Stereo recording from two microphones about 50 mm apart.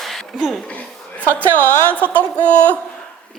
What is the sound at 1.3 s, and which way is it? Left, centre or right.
Speech, left.